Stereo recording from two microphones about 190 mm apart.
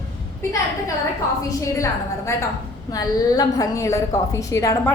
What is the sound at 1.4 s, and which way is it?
A woman's voice, 15° left (ahead or behind).